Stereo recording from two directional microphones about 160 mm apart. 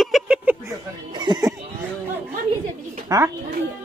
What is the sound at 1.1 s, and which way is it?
Speech, 30° right (ahead or behind).